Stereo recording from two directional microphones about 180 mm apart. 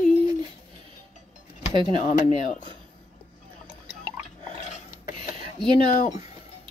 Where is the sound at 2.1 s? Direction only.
45° left (ahead or behind).